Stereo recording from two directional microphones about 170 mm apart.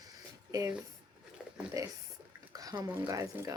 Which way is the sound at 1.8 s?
20° right (ahead or behind).